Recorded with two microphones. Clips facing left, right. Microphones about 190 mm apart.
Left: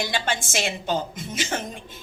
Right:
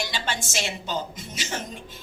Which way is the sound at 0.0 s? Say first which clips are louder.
Left 4 dB; 55° left (ahead or behind).